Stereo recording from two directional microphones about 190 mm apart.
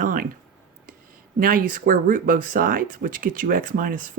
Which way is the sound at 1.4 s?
50° right (ahead or behind).